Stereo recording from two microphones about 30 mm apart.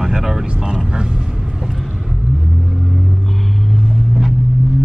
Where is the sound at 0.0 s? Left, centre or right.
Centre.